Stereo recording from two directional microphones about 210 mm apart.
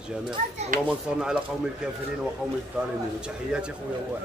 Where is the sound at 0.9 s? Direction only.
5° right (ahead or behind).